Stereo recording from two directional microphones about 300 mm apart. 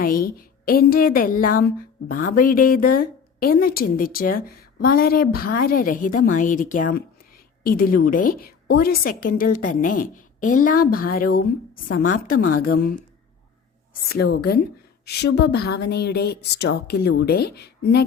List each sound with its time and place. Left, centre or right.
0.0 s a woman's voice: left
12.5 s a woman's voice: left
14.1 s a woman's voice: left